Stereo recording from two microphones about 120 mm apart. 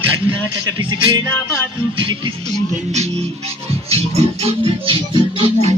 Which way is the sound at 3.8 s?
60° right (ahead or behind).